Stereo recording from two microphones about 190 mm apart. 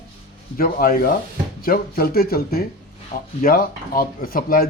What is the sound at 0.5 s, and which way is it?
Speech, 50° left (ahead or behind).